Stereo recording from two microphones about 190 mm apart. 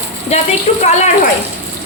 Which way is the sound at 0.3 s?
35° left (ahead or behind).